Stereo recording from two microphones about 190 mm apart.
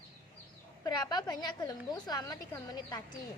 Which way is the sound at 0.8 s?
20° left (ahead or behind).